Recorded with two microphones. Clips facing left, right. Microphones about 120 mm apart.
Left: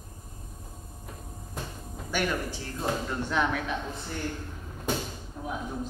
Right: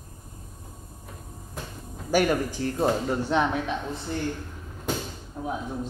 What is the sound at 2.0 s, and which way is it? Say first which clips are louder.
Speech: right 7 dB; 40° right (ahead or behind).